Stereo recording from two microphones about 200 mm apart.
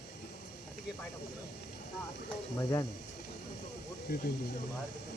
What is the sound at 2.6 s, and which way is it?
Speech, 15° left (ahead or behind).